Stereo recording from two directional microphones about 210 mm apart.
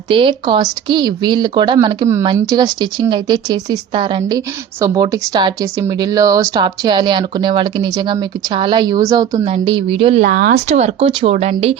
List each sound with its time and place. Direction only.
0.1 s speech: 25° right (ahead or behind)
10.2 s speech: 45° right (ahead or behind)